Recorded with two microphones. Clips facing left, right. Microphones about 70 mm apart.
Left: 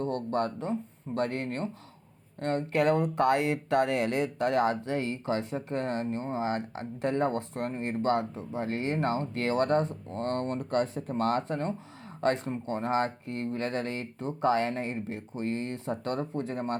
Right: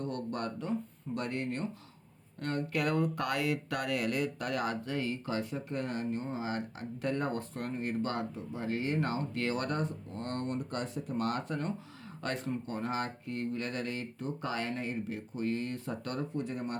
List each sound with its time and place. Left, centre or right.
0.0 s speech: left
10.1 s speech: left